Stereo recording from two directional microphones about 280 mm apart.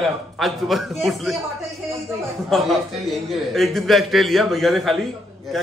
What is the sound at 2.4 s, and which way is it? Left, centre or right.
A man's voice, centre.